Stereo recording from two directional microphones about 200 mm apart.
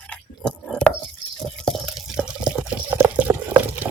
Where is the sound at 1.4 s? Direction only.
Centre (ahead or behind).